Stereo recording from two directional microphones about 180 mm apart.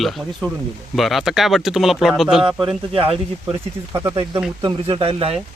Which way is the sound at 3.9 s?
15° right (ahead or behind).